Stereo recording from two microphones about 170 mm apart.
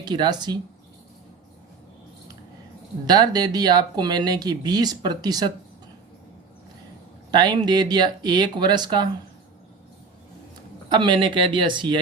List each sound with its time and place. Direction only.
0.0 s speech: 25° right (ahead or behind)
3.1 s speech: 25° right (ahead or behind)
7.3 s speech: 25° right (ahead or behind)
10.8 s speech: 25° right (ahead or behind)